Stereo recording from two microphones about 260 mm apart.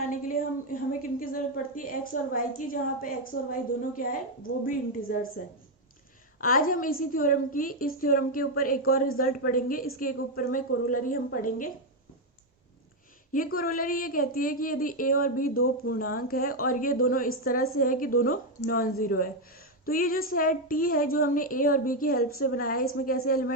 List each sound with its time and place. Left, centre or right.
0.1 s a sound: left
2.6 s a woman's voice: left
6.4 s a woman's voice: left
13.3 s a woman's voice: left
15.5 s speech: left
15.9 s a woman's voice: left